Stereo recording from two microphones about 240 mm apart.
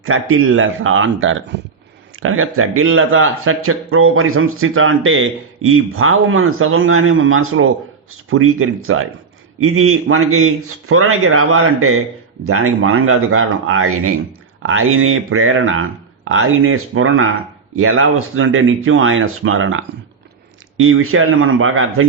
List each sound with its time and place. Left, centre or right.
0.0 s speech: right